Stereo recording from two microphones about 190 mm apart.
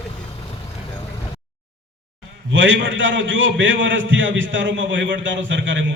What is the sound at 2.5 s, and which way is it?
A man's voice, 80° right.